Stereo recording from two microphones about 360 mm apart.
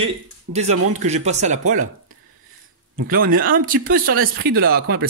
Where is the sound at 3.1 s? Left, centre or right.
Right.